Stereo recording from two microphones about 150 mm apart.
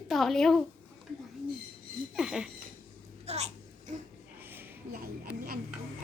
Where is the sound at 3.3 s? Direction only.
45° right (ahead or behind).